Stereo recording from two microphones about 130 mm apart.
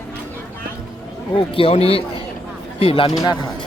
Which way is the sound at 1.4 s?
45° left (ahead or behind).